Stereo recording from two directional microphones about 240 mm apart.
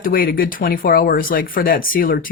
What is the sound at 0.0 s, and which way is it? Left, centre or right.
Speech, left.